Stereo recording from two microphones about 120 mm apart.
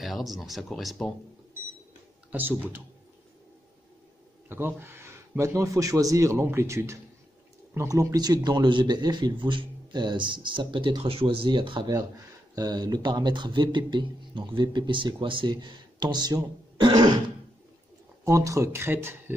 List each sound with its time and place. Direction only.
0.0 s speech: centre (ahead or behind)
2.3 s speech: 15° right (ahead or behind)
4.5 s speech: 20° right (ahead or behind); by 17.1 s 35° right (ahead or behind)
18.2 s speech: 25° right (ahead or behind)